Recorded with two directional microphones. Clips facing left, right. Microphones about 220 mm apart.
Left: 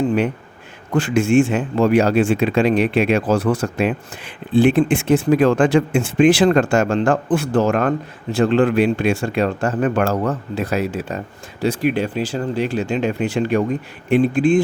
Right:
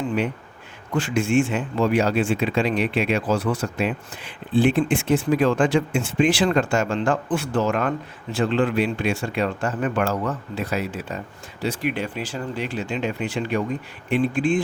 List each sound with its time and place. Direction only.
0.9 s speech: 50° left (ahead or behind)